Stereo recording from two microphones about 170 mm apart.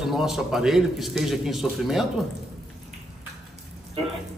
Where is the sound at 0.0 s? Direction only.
Centre (ahead or behind).